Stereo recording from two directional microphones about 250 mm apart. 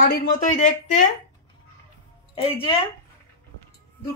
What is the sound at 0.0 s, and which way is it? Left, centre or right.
Speech, left.